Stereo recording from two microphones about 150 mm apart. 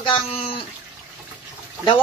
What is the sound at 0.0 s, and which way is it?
Speech, 35° left (ahead or behind).